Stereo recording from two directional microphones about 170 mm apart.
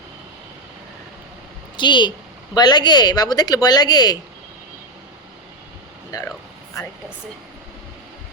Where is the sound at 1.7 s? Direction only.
25° left (ahead or behind).